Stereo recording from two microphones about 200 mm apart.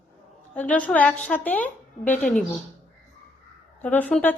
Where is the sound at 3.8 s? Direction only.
10° left (ahead or behind).